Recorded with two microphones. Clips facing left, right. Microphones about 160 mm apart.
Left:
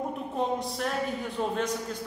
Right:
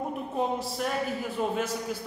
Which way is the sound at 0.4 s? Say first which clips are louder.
Even; 5° right (ahead or behind).